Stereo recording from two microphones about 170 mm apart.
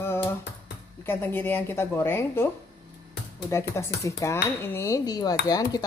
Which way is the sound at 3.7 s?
15° left (ahead or behind).